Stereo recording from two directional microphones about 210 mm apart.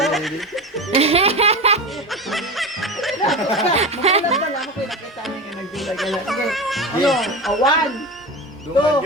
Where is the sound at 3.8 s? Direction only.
30° right (ahead or behind).